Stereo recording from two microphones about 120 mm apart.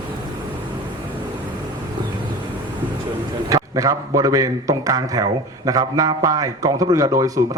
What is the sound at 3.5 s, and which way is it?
A man's voice, 30° right (ahead or behind).